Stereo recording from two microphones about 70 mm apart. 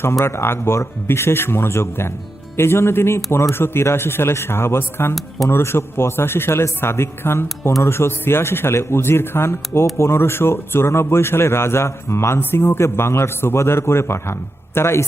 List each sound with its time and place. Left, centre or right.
0.2 s a man's voice: left